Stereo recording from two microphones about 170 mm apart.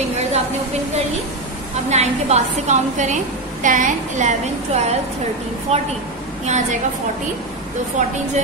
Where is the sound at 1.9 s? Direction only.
40° right (ahead or behind).